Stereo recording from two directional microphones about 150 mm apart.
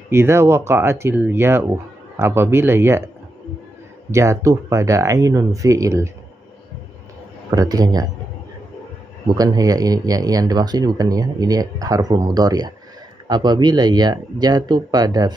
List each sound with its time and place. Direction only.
0.1 s speech: 15° right (ahead or behind)
4.1 s speech: 20° right (ahead or behind)
7.5 s speech: 25° right (ahead or behind)
9.3 s speech: 25° right (ahead or behind)